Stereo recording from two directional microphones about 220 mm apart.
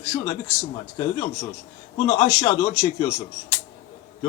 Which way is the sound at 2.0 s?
25° left (ahead or behind).